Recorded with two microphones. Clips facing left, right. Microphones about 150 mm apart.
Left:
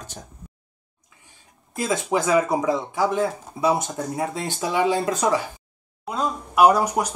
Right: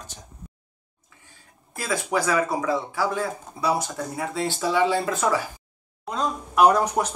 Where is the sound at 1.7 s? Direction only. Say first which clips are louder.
Left 3 dB; 20° left (ahead or behind).